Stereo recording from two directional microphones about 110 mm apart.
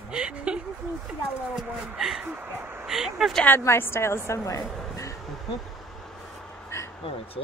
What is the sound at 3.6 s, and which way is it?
Speech, 25° left (ahead or behind).